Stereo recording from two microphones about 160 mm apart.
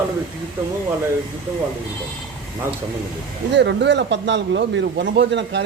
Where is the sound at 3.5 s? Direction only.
90° right.